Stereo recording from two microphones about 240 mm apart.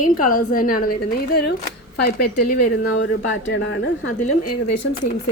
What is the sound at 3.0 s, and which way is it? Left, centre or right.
Speech, left.